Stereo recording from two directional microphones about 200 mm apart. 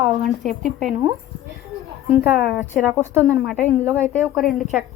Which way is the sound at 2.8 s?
10° right (ahead or behind).